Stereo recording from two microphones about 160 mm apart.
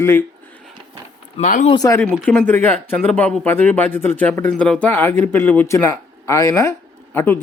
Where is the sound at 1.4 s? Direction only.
55° left (ahead or behind).